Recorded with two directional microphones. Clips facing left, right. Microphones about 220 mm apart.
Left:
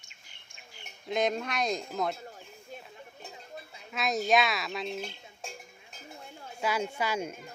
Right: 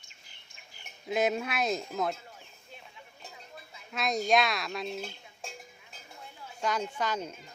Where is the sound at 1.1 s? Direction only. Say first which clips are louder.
Right 1 dB; 5° right (ahead or behind).